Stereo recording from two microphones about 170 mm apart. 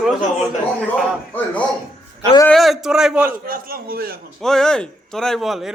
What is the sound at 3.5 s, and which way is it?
Speech, 60° right (ahead or behind).